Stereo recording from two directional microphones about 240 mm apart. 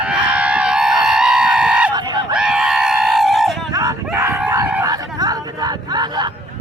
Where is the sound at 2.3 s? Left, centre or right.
Centre.